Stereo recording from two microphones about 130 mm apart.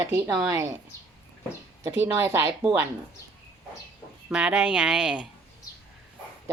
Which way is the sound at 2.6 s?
10° right (ahead or behind).